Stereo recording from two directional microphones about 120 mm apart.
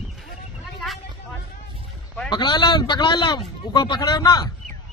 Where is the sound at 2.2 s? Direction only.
40° left (ahead or behind).